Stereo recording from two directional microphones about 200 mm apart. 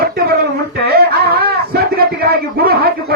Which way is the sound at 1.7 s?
50° right (ahead or behind).